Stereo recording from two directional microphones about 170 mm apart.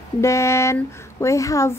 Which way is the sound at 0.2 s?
15° left (ahead or behind).